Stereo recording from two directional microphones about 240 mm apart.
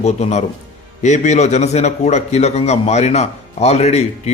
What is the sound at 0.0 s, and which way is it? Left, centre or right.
A man's voice, left.